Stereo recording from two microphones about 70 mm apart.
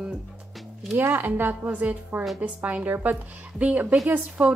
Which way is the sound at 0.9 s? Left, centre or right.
Right.